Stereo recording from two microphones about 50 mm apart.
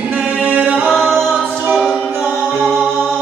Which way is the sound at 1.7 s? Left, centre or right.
Centre.